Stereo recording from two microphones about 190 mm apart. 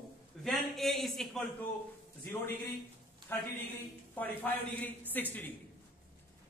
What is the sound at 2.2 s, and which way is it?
A woman's voice, 10° left (ahead or behind).